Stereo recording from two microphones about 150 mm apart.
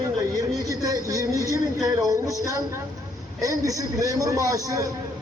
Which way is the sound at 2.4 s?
25° right (ahead or behind).